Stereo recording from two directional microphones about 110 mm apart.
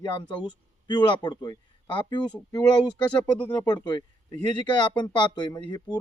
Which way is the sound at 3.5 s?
40° left (ahead or behind).